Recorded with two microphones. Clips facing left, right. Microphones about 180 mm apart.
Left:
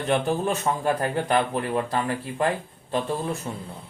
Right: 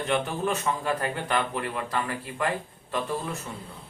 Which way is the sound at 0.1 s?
35° left (ahead or behind).